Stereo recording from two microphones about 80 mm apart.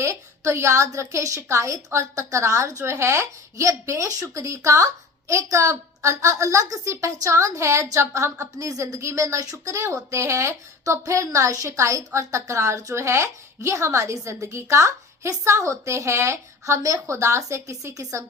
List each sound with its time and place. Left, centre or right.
0.0 s speech: right